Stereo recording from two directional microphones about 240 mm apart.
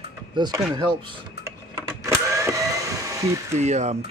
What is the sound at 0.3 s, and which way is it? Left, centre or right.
Speech, centre.